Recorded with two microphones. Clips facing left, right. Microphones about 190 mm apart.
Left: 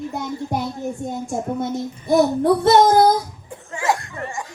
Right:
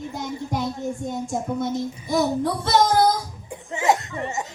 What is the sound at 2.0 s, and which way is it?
Child singing, 60° left (ahead or behind).